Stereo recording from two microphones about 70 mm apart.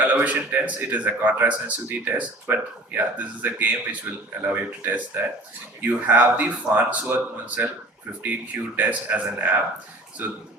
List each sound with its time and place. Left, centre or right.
0.0 s speech: right